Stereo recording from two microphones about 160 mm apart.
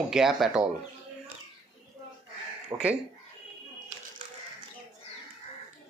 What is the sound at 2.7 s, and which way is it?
Speech, 15° right (ahead or behind).